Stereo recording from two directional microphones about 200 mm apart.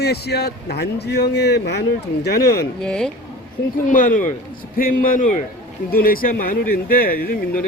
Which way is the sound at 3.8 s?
40° left (ahead or behind).